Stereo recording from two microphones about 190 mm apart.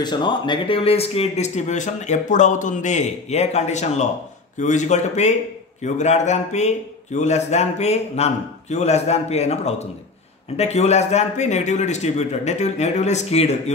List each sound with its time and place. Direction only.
0.0 s speech: 25° left (ahead or behind)